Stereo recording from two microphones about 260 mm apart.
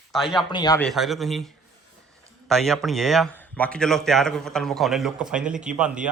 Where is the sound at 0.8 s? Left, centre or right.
Centre.